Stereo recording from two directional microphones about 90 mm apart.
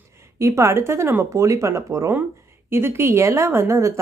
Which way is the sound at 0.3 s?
35° right (ahead or behind).